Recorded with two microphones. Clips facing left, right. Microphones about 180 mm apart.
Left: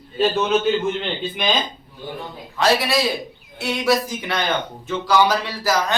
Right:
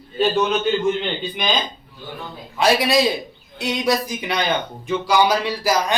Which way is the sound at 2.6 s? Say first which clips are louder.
Right 2 dB; 15° right (ahead or behind).